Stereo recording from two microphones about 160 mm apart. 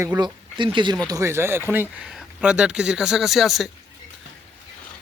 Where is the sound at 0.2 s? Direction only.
30° right (ahead or behind).